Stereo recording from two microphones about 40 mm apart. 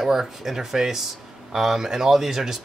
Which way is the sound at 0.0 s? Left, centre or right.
Centre.